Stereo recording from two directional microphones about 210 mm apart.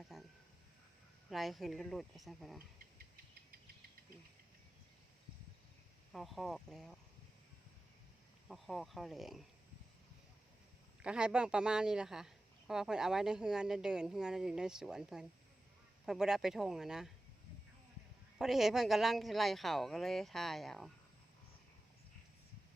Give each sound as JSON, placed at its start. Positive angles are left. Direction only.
{"t": 0.1, "sound": "a sound", "side_deg": 0}
{"t": 1.3, "sound": "speech", "side_deg": 0}
{"t": 6.1, "sound": "speech", "side_deg": 0}
{"t": 8.4, "sound": "speech", "side_deg": 0}
{"t": 11.0, "sound": "speech", "side_deg": -5}
{"t": 18.3, "sound": "speech", "side_deg": 0}